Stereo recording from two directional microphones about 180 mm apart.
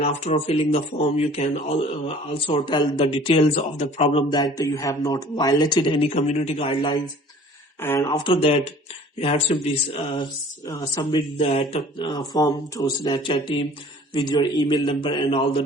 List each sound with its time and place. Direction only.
0.0 s speech: 40° left (ahead or behind)
4.3 s speech: 20° left (ahead or behind)
7.8 s speech: 10° left (ahead or behind)
8.2 s speech: 30° left (ahead or behind)
10.7 s speech: 20° left (ahead or behind)
11.3 s speech: 35° left (ahead or behind)